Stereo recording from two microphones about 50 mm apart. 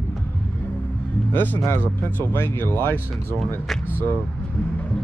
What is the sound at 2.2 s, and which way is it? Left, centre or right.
Speech, left.